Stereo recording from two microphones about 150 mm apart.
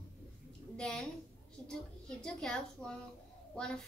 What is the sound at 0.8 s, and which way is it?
Speech, 5° left (ahead or behind).